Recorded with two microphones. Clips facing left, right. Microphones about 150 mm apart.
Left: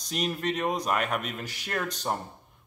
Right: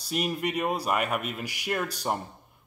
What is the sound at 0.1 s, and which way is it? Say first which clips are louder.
Speech: right 1 dB; 10° right (ahead or behind).